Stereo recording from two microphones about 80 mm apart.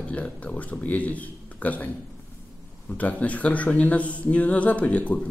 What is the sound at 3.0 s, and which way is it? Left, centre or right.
Speech, centre.